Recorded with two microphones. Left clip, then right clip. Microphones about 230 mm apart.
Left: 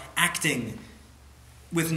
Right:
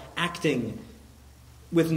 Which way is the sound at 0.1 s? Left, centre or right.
Left.